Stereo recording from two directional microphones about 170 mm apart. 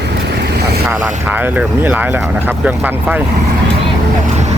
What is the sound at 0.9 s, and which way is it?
Speech, 10° right (ahead or behind).